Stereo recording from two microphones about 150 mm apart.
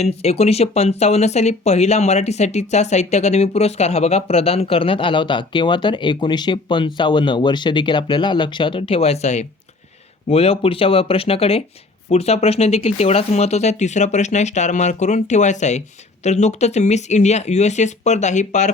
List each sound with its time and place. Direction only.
0.0 s speech: 45° left (ahead or behind)